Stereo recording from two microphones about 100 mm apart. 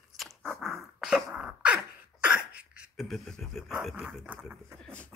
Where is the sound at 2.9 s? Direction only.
Centre (ahead or behind).